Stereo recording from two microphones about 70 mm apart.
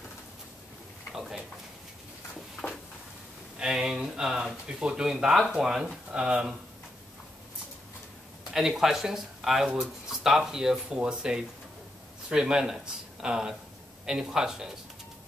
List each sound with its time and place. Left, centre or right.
1.1 s a sound: centre
3.5 s speech: centre
8.5 s speech: centre